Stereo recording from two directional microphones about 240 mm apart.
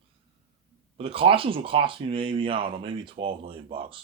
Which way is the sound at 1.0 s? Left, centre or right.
Right.